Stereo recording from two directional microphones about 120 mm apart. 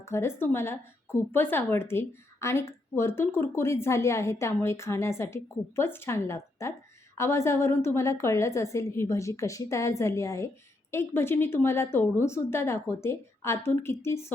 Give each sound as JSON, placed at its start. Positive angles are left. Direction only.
{"t": 0.0, "sound": "speech", "side_deg": 20}